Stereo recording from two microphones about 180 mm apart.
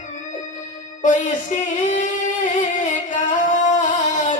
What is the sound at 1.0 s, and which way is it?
Music, 45° left (ahead or behind).